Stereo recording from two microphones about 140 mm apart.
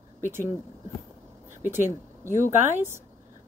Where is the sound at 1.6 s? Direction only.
15° right (ahead or behind).